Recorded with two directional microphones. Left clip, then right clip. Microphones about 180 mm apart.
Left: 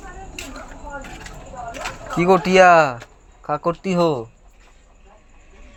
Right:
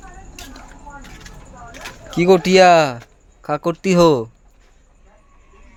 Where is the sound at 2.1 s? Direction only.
45° right (ahead or behind); by 4.2 s 60° right (ahead or behind).